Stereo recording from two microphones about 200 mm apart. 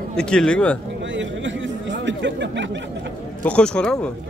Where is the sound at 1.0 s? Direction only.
65° right (ahead or behind).